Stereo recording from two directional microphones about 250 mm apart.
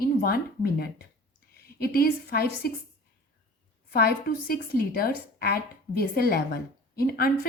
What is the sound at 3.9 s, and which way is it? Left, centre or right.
A woman's voice, left.